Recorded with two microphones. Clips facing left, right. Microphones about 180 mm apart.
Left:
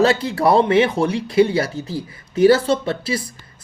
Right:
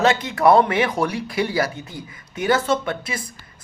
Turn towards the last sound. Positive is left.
turn(degrees=30)  # may be behind; listen again after turning